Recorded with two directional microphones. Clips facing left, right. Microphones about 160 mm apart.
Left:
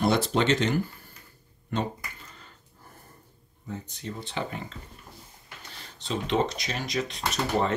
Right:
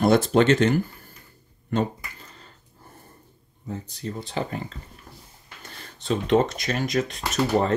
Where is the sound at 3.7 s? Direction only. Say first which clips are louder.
Right 4 dB; 35° right (ahead or behind).